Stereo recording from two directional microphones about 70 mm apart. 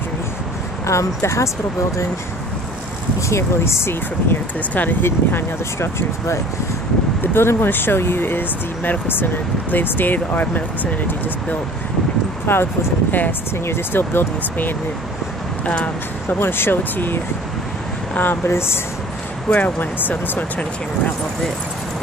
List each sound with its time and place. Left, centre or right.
0.8 s speech: left
3.2 s speech: left
4.6 s speech: left
12.4 s speech: left
15.6 s speech: centre
16.3 s speech: left
19.5 s speech: left